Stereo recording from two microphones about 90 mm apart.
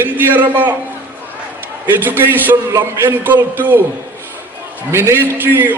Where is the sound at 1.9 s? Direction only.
25° right (ahead or behind).